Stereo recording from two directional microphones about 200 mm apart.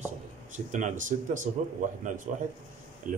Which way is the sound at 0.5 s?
35° right (ahead or behind).